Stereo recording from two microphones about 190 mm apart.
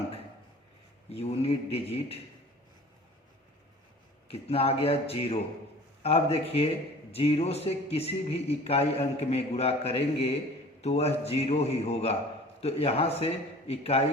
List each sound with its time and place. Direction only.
1.1 s speech: 30° left (ahead or behind)
4.3 s speech: 30° left (ahead or behind)